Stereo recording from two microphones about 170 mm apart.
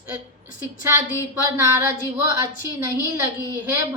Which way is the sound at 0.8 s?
15° right (ahead or behind).